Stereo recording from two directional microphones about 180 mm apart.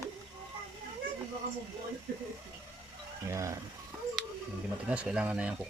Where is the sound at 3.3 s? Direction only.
15° right (ahead or behind).